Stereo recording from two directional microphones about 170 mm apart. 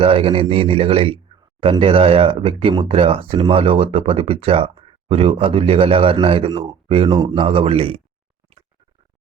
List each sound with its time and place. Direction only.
0.0 s speech: 35° right (ahead or behind)